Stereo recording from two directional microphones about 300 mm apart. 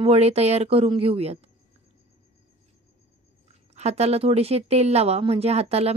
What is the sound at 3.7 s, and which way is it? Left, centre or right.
Speech, right.